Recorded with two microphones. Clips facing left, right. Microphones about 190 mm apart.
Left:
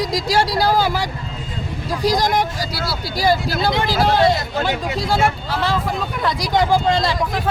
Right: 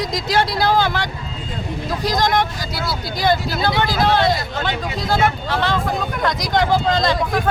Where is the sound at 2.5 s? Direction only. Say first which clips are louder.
Even; 35° left (ahead or behind).